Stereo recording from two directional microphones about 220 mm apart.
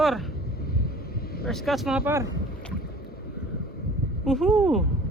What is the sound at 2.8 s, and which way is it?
Boat, 45° left (ahead or behind).